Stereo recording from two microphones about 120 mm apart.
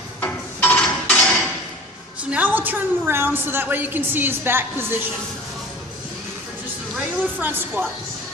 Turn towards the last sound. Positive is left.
turn(degrees=-15)  # may be behind; listen again after turning